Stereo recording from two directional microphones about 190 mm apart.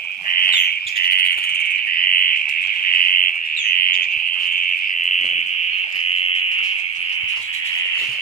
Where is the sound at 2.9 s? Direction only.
50° left (ahead or behind).